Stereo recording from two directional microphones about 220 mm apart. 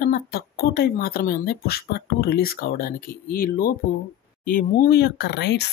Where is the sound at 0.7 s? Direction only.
45° left (ahead or behind).